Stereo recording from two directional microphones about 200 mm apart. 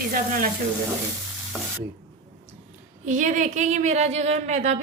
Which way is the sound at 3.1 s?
40° right (ahead or behind).